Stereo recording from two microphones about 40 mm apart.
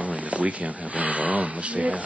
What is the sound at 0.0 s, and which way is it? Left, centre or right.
Speech, right.